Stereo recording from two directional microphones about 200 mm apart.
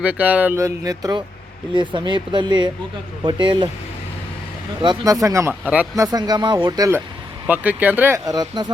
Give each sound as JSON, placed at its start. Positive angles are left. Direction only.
{"t": 0.0, "sound": "speech", "side_deg": -5}
{"t": 4.8, "sound": "speech", "side_deg": -20}
{"t": 6.1, "sound": "speech", "side_deg": -20}